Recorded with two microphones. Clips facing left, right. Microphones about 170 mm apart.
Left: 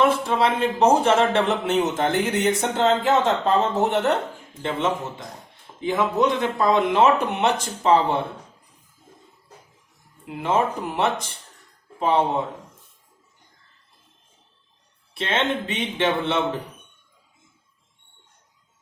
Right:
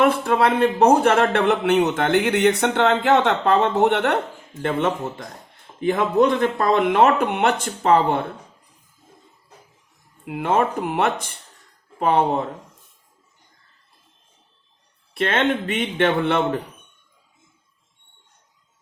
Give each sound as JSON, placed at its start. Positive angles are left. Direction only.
{"t": 0.0, "sound": "speech", "side_deg": -60}
{"t": 10.2, "sound": "speech", "side_deg": -55}
{"t": 15.1, "sound": "speech", "side_deg": -55}